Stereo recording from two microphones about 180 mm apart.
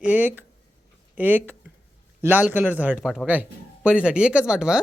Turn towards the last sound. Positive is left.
turn(degrees=-5)  # may be behind; listen again after turning